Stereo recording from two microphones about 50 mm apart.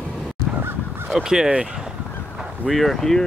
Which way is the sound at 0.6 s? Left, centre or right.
Right.